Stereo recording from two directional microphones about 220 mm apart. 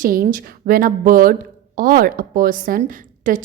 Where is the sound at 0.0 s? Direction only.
40° right (ahead or behind).